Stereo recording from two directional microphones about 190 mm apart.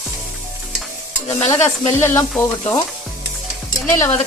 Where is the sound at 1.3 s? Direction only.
15° left (ahead or behind).